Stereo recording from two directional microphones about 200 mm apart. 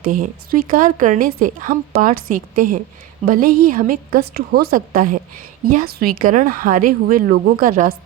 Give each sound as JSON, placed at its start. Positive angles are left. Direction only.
{"t": 0.0, "sound": "a woman's voice", "side_deg": -45}